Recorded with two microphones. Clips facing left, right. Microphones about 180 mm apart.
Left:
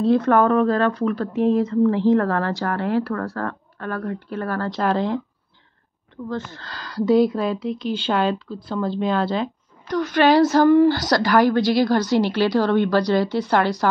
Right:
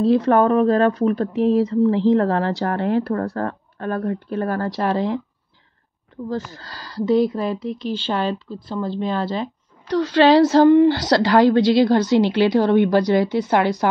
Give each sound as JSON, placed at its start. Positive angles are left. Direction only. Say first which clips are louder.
{"t": 0.0, "sound": "a woman's voice", "louder": "right 1 dB", "side_deg": -25}
{"t": 6.2, "sound": "speech", "louder": "right 2 dB", "side_deg": -40}
{"t": 7.1, "sound": "a woman's voice", "louder": "left 1 dB", "side_deg": 0}
{"t": 9.8, "sound": "a woman's voice", "louder": "right 3 dB", "side_deg": -25}